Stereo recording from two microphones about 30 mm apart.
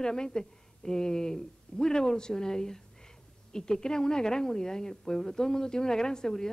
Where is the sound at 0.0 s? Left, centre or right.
Left.